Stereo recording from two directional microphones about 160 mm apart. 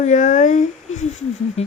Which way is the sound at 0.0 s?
50° left (ahead or behind).